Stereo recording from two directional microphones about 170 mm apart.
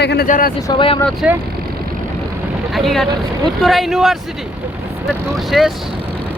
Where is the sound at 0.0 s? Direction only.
80° left.